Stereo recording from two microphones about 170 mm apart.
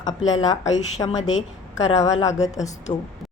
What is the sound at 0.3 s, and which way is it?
A woman's voice, 25° left (ahead or behind).